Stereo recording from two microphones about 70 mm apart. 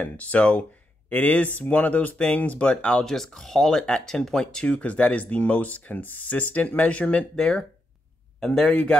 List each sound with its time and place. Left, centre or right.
0.0 s speech: left
3.1 s speech: centre
8.6 s speech: left